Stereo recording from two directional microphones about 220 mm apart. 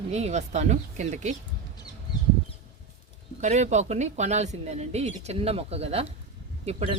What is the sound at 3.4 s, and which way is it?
Speech, 30° right (ahead or behind).